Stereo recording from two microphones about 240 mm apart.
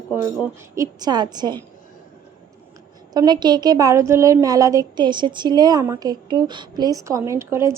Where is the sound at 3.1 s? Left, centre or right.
Centre.